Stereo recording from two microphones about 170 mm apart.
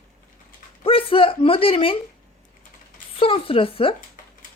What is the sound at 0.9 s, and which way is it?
Speech, 30° left (ahead or behind).